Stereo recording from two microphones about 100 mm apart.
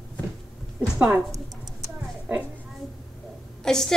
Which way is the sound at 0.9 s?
15° right (ahead or behind).